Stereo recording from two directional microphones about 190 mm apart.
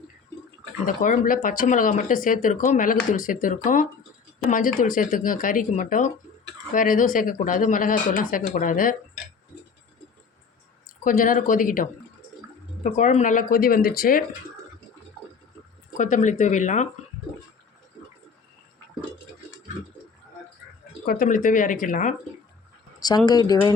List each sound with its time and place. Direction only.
0.9 s speech: 45° left (ahead or behind)
11.0 s speech: 45° left (ahead or behind)
16.0 s speech: 40° left (ahead or behind)
21.0 s speech: 50° left (ahead or behind)
23.0 s speech: 20° left (ahead or behind)